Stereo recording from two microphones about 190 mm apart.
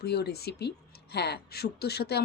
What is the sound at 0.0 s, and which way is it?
Speech, 55° left (ahead or behind).